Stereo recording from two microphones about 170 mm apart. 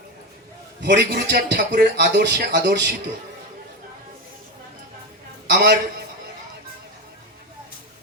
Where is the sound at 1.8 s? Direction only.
90° right.